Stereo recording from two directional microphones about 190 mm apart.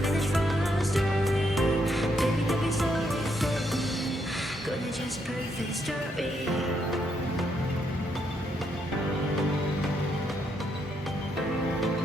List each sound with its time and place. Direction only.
0.0 s music: centre (ahead or behind)
6.1 s music: centre (ahead or behind)